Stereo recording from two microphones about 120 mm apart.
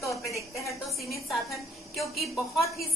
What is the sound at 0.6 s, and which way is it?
Speech, 25° left (ahead or behind).